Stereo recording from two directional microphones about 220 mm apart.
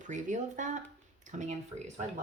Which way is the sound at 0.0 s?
35° right (ahead or behind).